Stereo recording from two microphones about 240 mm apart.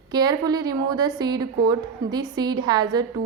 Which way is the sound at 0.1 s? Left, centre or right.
Centre.